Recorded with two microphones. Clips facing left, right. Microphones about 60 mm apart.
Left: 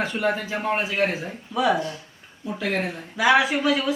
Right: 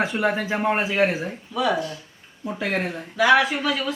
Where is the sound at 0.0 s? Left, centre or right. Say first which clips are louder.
Right 2 dB; centre.